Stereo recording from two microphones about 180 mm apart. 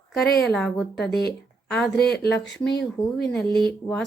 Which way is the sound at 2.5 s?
80° left.